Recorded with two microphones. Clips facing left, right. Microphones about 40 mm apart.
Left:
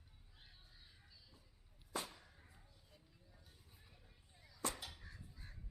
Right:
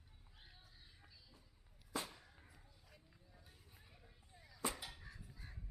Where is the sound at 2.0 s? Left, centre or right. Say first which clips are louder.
Even; centre.